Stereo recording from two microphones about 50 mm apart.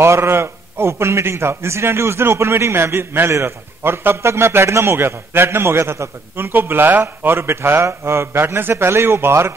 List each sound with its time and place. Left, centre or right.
0.0 s a man's voice: right